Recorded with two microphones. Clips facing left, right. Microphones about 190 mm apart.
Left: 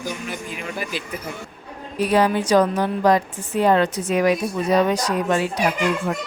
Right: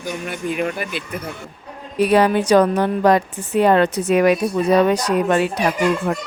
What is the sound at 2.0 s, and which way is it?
A woman's voice, 65° right (ahead or behind).